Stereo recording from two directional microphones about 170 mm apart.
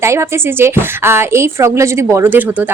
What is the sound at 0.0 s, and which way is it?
A woman's voice, 15° right (ahead or behind).